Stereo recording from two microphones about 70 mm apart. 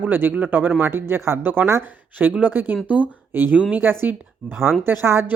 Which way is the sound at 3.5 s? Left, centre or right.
Centre.